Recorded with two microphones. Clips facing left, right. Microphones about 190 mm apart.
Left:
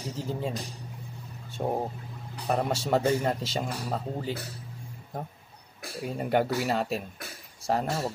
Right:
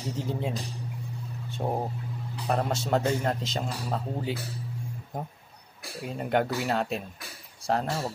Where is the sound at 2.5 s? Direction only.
10° left (ahead or behind).